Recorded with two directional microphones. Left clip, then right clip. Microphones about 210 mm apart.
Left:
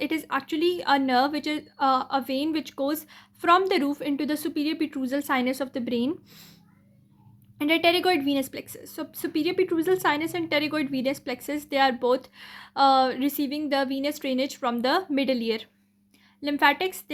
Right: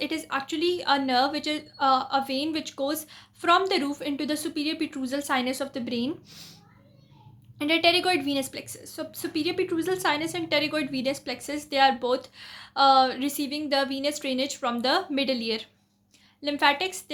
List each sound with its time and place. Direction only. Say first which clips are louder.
0.0 s a woman's voice: left 2 dB; 35° left (ahead or behind)
7.6 s a woman's voice: even; 30° left (ahead or behind)